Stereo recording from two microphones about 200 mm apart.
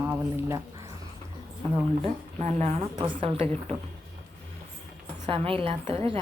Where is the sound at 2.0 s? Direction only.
35° right (ahead or behind).